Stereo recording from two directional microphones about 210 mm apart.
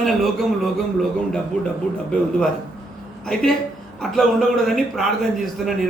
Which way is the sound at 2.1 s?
5° left (ahead or behind).